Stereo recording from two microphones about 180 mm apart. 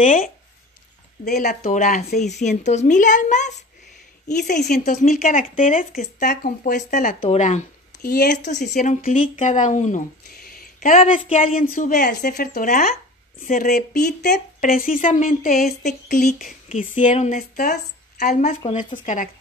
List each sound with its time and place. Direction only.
0.0 s speech: 45° left (ahead or behind)
1.3 s a woman's voice: 55° left (ahead or behind)
1.6 s speech: 45° left (ahead or behind)
4.6 s a woman's voice: 60° left (ahead or behind); by 8.1 s 40° left (ahead or behind)
8.1 s a woman's voice: 65° left (ahead or behind)
8.4 s a woman's voice: 40° left (ahead or behind)
10.3 s a sound: 55° left (ahead or behind)
11.1 s a woman's voice: 30° left (ahead or behind)
11.7 s speech: 50° left (ahead or behind)
12.1 s speech: 60° left (ahead or behind)
15.8 s a woman's voice: 40° left (ahead or behind)
18.7 s a woman's voice: 30° left (ahead or behind)